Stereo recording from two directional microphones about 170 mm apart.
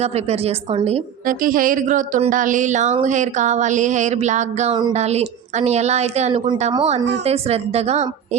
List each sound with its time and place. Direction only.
0.0 s a woman's voice: 35° right (ahead or behind)
1.3 s a woman's voice: 55° right (ahead or behind)